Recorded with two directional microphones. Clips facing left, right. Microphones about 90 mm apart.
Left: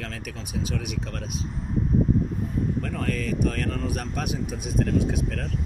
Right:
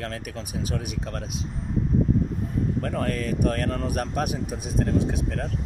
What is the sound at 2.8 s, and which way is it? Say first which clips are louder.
Speech: right 2 dB; 35° right (ahead or behind).